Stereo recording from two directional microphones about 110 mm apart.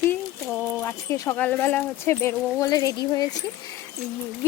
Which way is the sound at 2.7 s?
35° left (ahead or behind).